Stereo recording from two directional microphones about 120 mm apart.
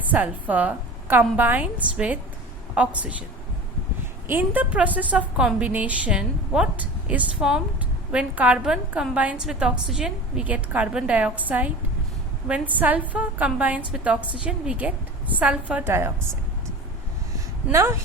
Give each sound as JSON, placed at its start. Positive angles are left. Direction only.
{"t": 0.0, "sound": "a woman's voice", "side_deg": -15}
{"t": 4.3, "sound": "a woman's voice", "side_deg": -15}
{"t": 17.7, "sound": "speech", "side_deg": -25}